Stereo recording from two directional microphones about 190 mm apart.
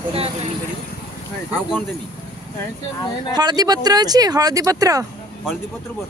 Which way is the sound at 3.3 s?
20° right (ahead or behind).